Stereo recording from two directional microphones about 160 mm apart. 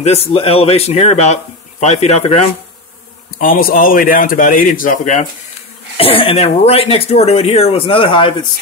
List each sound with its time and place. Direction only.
0.0 s speech: 40° left (ahead or behind)
3.3 s speech: 65° left (ahead or behind)
5.9 s speech: 35° left (ahead or behind)